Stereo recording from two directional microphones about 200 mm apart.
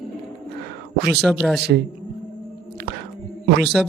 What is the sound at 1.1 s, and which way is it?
Speech, centre (ahead or behind).